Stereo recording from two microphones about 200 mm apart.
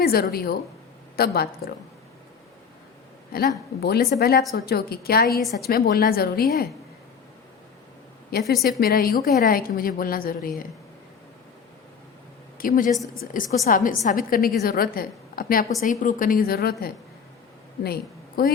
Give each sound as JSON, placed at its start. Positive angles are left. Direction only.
{"t": 0.0, "sound": "a woman's voice", "side_deg": 50}
{"t": 3.3, "sound": "a woman's voice", "side_deg": 50}
{"t": 5.4, "sound": "a woman's voice", "side_deg": 0}
{"t": 5.6, "sound": "a woman's voice", "side_deg": 50}
{"t": 8.3, "sound": "a woman's voice", "side_deg": 50}
{"t": 12.5, "sound": "a woman's voice", "side_deg": 45}